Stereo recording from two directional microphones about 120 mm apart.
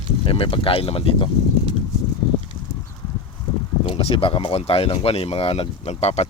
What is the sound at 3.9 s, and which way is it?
Speech, 55° left (ahead or behind).